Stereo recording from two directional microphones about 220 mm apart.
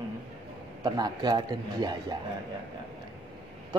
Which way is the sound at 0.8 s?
20° right (ahead or behind).